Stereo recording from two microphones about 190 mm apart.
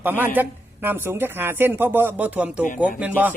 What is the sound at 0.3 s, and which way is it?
Speech, 10° right (ahead or behind).